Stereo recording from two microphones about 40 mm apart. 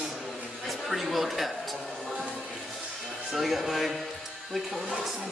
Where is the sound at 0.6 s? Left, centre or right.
Centre.